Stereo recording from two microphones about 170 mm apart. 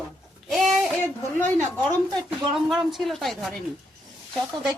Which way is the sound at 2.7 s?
Centre (ahead or behind).